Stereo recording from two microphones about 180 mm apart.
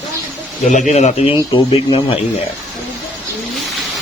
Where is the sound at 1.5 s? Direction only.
25° left (ahead or behind).